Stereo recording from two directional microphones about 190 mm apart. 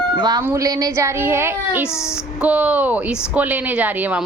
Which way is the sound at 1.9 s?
15° left (ahead or behind).